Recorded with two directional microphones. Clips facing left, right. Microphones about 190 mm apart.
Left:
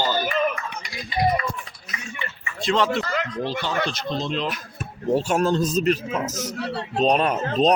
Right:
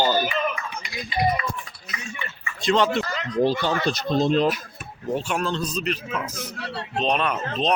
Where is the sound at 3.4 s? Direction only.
45° right (ahead or behind).